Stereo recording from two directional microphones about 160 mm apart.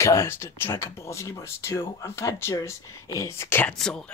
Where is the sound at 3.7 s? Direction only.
5° left (ahead or behind).